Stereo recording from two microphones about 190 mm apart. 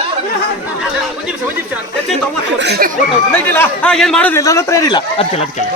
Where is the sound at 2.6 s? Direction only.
55° right (ahead or behind).